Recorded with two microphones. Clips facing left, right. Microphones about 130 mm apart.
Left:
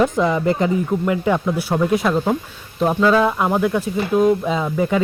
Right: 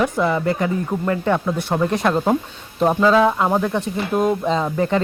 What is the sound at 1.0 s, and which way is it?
Speech, 10° left (ahead or behind).